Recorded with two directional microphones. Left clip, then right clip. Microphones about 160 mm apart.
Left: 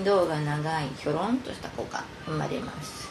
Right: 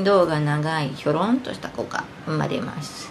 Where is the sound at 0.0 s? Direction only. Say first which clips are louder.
Right 6 dB; 15° right (ahead or behind).